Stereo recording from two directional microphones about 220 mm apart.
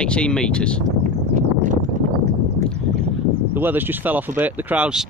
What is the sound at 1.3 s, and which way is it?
Clip-clop, 35° right (ahead or behind).